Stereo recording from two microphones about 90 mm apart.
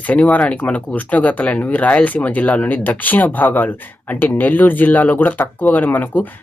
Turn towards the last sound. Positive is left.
turn(degrees=20)  # may be behind; listen again after turning